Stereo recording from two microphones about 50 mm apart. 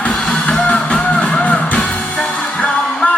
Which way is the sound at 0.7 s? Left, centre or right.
Left.